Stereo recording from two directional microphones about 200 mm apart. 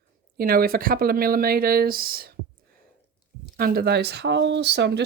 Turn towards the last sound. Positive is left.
turn(degrees=-55)  # may be behind; listen again after turning